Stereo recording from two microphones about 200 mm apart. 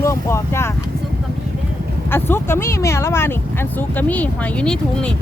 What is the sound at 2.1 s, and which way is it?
Speech, 10° left (ahead or behind).